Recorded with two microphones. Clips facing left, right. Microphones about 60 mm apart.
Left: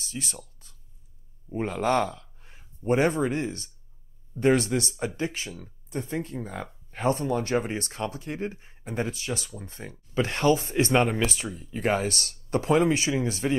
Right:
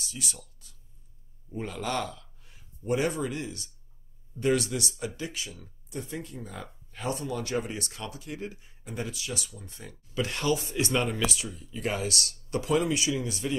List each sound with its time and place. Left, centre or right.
0.0 s speech: left